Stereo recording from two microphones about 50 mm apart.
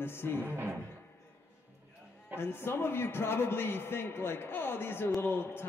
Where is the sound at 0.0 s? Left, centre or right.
Left.